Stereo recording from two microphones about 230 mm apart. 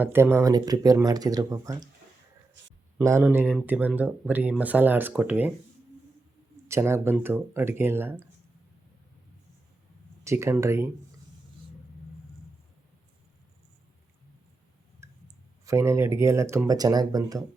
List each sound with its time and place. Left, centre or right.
0.0 s speech: centre
3.0 s speech: centre
6.7 s speech: centre
10.2 s speech: centre
15.0 s clicking: centre
15.6 s speech: centre